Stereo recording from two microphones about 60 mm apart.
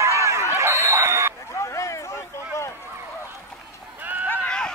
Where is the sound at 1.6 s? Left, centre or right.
Left.